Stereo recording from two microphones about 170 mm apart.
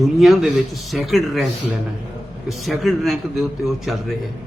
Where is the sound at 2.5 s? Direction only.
Centre (ahead or behind).